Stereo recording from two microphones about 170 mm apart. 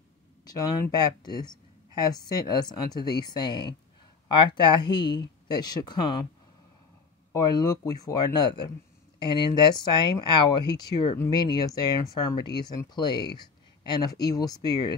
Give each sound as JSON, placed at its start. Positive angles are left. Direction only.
{"t": 0.5, "sound": "speech", "side_deg": 25}
{"t": 7.3, "sound": "speech", "side_deg": 20}